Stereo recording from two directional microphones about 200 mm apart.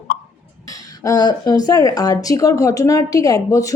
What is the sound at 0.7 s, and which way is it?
A woman's voice, 15° left (ahead or behind).